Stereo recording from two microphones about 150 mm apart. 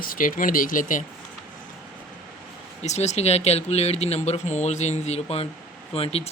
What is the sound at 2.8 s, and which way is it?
Speech, 50° left (ahead or behind).